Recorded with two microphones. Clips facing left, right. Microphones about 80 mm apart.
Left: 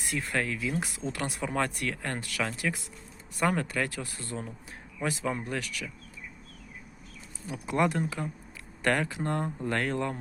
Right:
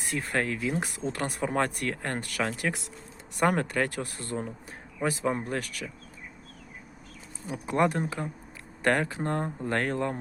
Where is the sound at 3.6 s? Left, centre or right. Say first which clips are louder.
Right 3 dB; right.